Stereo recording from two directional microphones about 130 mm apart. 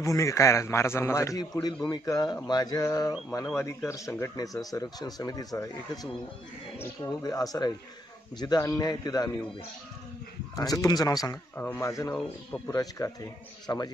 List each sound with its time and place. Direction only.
0.0 s speech: 25° left (ahead or behind)
7.2 s speech: 30° left (ahead or behind)
10.5 s speech: 30° left (ahead or behind)
11.5 s speech: 15° left (ahead or behind)
12.1 s speech: 5° left (ahead or behind)
12.7 s speech: 25° left (ahead or behind)